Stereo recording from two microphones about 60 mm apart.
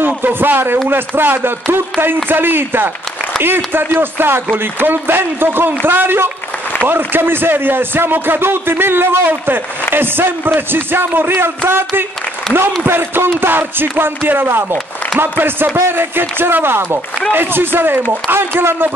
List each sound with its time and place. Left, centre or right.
0.0 s a man's voice: right
12.8 s speech: right